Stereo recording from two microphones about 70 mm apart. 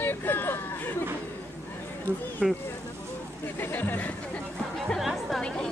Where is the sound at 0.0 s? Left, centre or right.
Left.